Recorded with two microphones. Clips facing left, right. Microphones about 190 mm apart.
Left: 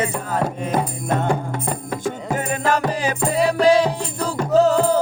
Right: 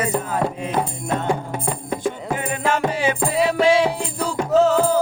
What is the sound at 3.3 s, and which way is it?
Music, centre (ahead or behind).